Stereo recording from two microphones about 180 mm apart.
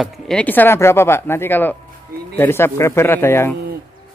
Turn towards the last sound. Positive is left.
turn(degrees=10)  # may be behind; listen again after turning